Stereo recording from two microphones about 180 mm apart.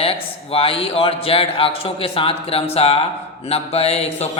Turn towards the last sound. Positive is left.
turn(degrees=35)  # may be behind; listen again after turning